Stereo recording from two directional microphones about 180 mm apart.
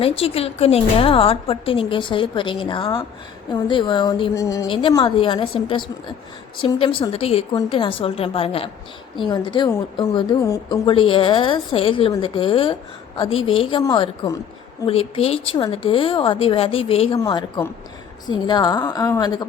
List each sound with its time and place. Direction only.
0.2 s a woman's voice: 35° left (ahead or behind)
9.6 s speech: 15° left (ahead or behind)
14.8 s a woman's voice: 30° left (ahead or behind)
17.2 s speech: 20° left (ahead or behind)